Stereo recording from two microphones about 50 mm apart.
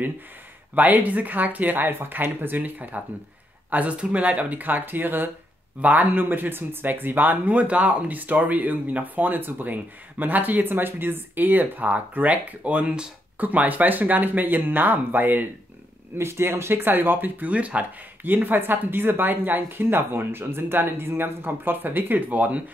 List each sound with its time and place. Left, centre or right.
0.7 s speech: right; by 13.1 s centre
13.4 s speech: right
16.2 s speech: right
17.5 s speech: right
18.2 s speech: right